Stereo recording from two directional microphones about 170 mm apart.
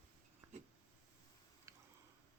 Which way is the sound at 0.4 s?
15° right (ahead or behind).